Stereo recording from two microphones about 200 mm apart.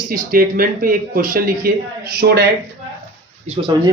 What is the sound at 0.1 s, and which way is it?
A man's voice, 45° right (ahead or behind).